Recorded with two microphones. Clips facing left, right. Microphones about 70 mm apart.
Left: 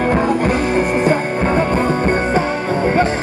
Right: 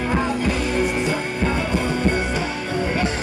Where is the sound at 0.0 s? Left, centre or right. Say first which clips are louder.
Left 6 dB; left.